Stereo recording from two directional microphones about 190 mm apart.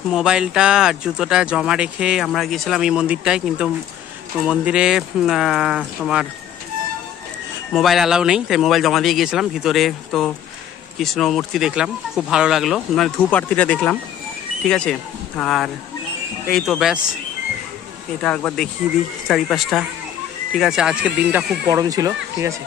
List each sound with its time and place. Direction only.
0.1 s speech: 5° right (ahead or behind)
7.7 s speech: centre (ahead or behind)
18.2 s speech: 5° left (ahead or behind)
21.6 s speech: 20° right (ahead or behind)